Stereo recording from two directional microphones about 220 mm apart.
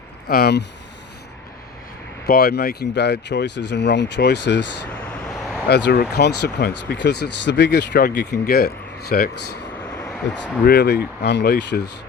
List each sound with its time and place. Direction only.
0.3 s speech: 45° left (ahead or behind)
2.2 s speech: 45° left (ahead or behind)
5.6 s speech: 50° left (ahead or behind)